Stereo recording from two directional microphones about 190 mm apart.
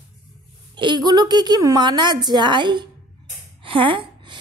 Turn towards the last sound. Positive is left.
turn(degrees=-25)  # may be behind; listen again after turning